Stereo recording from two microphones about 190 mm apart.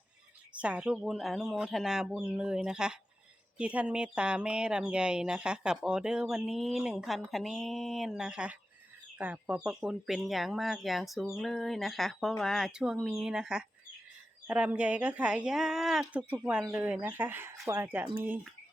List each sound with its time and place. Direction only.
0.6 s speech: 5° right (ahead or behind)